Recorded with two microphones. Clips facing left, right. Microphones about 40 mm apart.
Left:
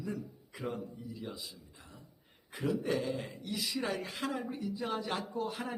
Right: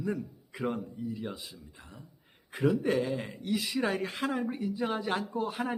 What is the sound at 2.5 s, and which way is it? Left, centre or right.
A man's voice, right.